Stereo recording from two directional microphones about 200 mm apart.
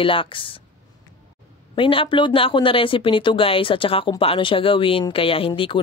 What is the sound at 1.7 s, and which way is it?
Speech, 25° left (ahead or behind).